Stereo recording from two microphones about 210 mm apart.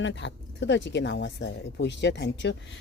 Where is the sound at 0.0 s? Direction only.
60° left (ahead or behind).